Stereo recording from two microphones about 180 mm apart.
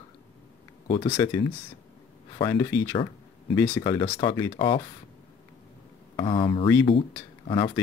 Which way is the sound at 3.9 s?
25° left (ahead or behind).